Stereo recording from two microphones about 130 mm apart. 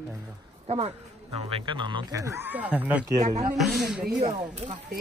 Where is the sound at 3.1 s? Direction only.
60° right (ahead or behind).